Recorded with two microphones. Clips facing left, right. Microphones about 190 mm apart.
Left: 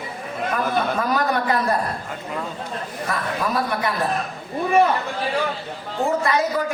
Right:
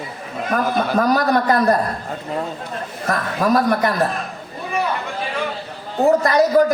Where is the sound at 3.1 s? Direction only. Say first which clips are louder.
Right 7 dB; 45° right (ahead or behind).